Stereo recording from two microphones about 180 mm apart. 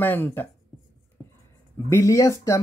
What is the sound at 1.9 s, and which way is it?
Speech, 15° left (ahead or behind).